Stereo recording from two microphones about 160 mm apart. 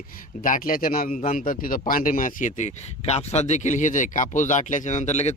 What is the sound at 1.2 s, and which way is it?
Speech, 40° left (ahead or behind).